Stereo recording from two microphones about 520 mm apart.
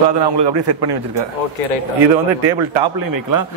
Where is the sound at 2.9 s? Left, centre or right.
Right.